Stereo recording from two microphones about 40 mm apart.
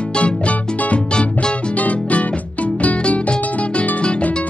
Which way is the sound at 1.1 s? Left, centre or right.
Left.